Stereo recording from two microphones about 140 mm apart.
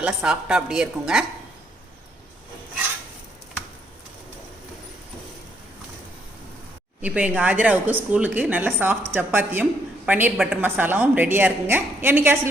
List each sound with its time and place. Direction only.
0.0 s a woman's voice: 5° right (ahead or behind)
7.0 s speech: 10° right (ahead or behind)